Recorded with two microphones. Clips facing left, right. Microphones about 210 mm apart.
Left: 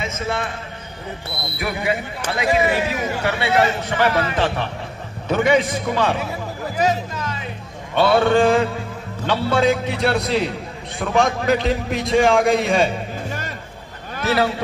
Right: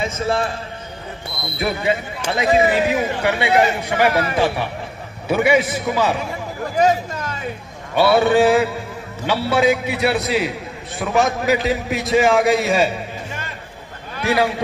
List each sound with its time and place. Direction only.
0.0 s a man's voice: 35° right (ahead or behind)
1.9 s speech: 25° right (ahead or behind); by 6.1 s 5° right (ahead or behind)
6.8 s speech: 50° right (ahead or behind)
7.9 s a man's voice: 10° right (ahead or behind)
14.2 s speech: 15° right (ahead or behind)